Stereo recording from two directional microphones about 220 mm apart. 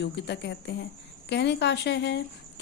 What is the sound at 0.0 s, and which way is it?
Speech, 50° left (ahead or behind).